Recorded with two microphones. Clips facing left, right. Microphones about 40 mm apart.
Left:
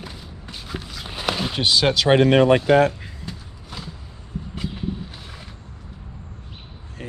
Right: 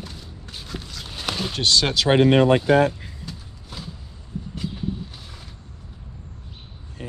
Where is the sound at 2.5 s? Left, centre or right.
Left.